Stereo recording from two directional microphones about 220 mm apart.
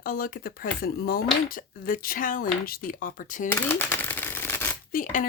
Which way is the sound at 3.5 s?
10° left (ahead or behind).